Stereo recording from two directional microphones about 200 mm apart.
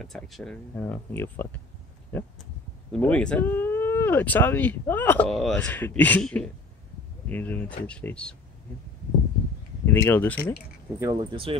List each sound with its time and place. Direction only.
0.0 s speech: centre (ahead or behind)
9.8 s speech: 10° left (ahead or behind)
11.0 s speech: 20° right (ahead or behind)